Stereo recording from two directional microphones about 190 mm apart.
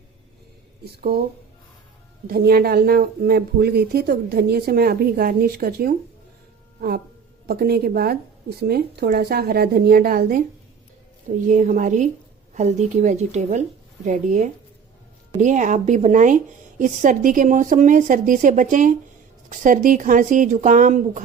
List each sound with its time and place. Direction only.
2.2 s speech: 55° right (ahead or behind)
7.4 s speech: 55° right (ahead or behind)
11.4 s speech: 40° right (ahead or behind)